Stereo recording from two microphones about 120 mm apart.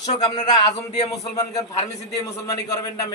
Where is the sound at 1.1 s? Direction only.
30° left (ahead or behind).